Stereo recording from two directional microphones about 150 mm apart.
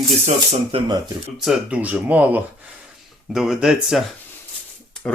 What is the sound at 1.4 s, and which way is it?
Speech, 5° right (ahead or behind).